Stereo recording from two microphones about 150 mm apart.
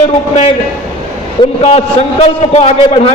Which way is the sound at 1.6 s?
40° left (ahead or behind).